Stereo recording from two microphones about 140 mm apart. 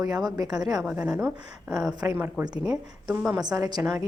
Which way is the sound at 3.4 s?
25° right (ahead or behind).